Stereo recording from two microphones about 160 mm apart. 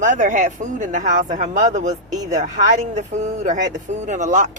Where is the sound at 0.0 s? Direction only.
50° right (ahead or behind).